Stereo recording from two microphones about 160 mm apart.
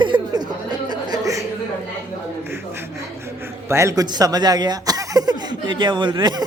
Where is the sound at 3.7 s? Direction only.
20° right (ahead or behind).